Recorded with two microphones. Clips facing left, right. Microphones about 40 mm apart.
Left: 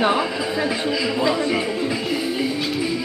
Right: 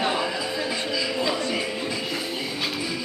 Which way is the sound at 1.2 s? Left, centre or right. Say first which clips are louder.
Left 7 dB; centre.